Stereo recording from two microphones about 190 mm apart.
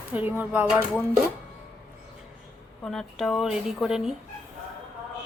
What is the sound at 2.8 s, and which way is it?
A woman's voice, centre (ahead or behind).